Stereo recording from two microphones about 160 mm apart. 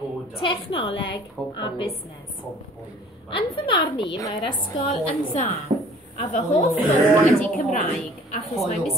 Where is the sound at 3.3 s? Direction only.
30° left (ahead or behind).